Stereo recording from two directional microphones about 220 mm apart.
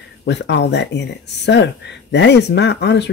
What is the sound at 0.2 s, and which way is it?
Speech, 50° left (ahead or behind).